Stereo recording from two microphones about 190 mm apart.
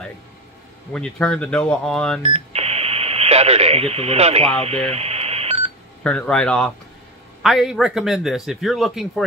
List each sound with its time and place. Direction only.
0.9 s speech: 5° left (ahead or behind)
2.2 s radio: 35° right (ahead or behind)
4.6 s telephone dialing: 30° right (ahead or behind)
6.0 s a man's voice: 5° left (ahead or behind)